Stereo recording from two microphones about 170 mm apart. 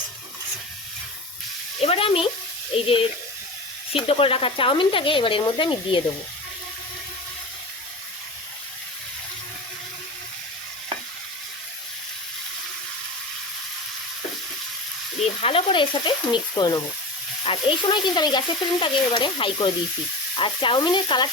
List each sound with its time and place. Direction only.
1.8 s speech: 35° left (ahead or behind)
15.4 s speech: 35° left (ahead or behind)